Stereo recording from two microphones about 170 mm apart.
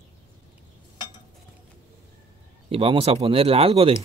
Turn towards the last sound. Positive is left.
turn(degrees=-35)  # may be behind; listen again after turning